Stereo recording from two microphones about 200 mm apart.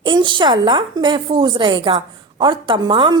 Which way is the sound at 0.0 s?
25° right (ahead or behind).